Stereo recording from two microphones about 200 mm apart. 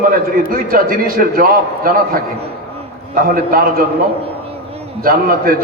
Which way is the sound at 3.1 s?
45° right (ahead or behind).